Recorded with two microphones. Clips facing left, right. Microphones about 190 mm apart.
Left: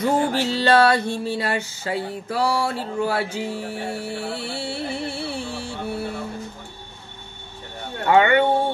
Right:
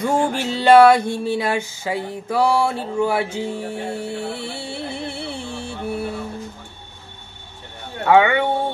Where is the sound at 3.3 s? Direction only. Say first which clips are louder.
Right 2 dB; 25° right (ahead or behind).